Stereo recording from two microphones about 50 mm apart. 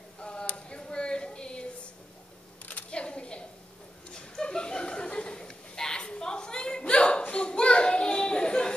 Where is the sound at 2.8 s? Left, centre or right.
Left.